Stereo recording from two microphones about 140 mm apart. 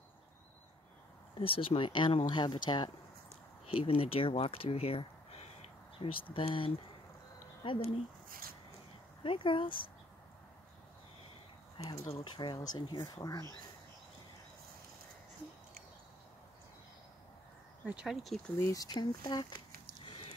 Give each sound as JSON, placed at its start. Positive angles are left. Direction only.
{"t": 1.4, "sound": "speech", "side_deg": 40}
{"t": 8.3, "sound": "speech", "side_deg": -90}
{"t": 9.2, "sound": "speech", "side_deg": 40}
{"t": 11.8, "sound": "speech", "side_deg": 25}
{"t": 17.8, "sound": "speech", "side_deg": -5}
{"t": 18.6, "sound": "speech", "side_deg": 25}